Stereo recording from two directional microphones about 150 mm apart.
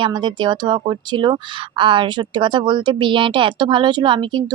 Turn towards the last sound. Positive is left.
turn(degrees=-30)  # may be behind; listen again after turning